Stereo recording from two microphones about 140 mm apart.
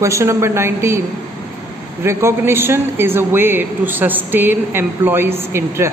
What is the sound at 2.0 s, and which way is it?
A man's voice, 20° right (ahead or behind).